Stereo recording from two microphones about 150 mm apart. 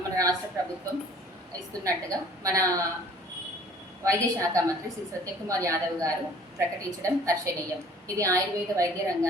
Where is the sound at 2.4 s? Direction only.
20° right (ahead or behind).